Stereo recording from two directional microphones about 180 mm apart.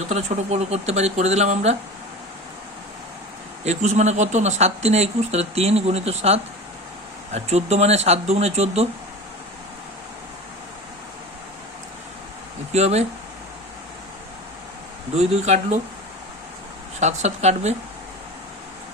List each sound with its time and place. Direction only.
0.1 s speech: 40° right (ahead or behind)
3.6 s speech: 40° right (ahead or behind)
7.3 s speech: 35° right (ahead or behind)
12.7 s speech: 35° right (ahead or behind)
15.1 s speech: 35° right (ahead or behind)
17.0 s speech: 40° right (ahead or behind)